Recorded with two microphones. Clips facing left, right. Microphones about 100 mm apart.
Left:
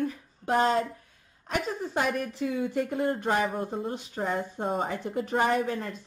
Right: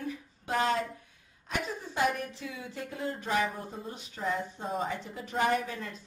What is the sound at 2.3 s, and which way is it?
A woman's voice, 55° left (ahead or behind).